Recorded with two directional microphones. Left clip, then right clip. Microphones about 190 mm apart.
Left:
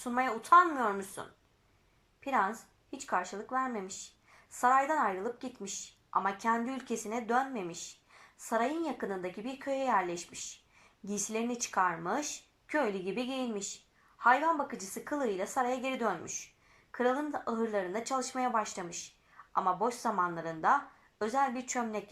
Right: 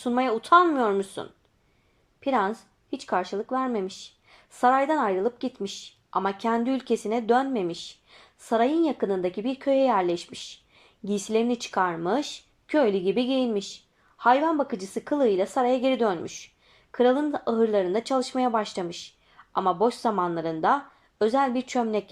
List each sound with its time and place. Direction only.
0.0 s speech: 25° right (ahead or behind)